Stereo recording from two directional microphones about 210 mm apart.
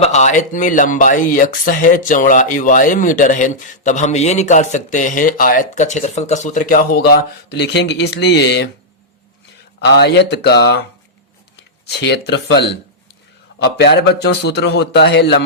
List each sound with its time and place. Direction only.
0.0 s speech: 35° left (ahead or behind); by 8.7 s 55° left (ahead or behind)
9.8 s speech: 55° left (ahead or behind)
11.9 s a man's voice: 55° left (ahead or behind)